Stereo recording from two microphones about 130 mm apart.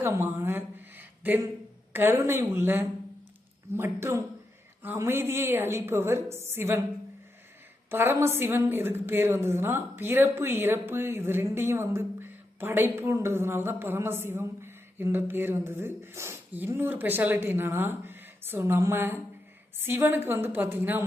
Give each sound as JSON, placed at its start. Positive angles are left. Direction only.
{"t": 0.0, "sound": "a sound", "side_deg": -15}
{"t": 1.9, "sound": "a woman's voice", "side_deg": -15}
{"t": 7.9, "sound": "a woman's voice", "side_deg": -20}